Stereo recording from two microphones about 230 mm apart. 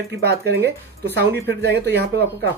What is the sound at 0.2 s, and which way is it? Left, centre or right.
Speech, right.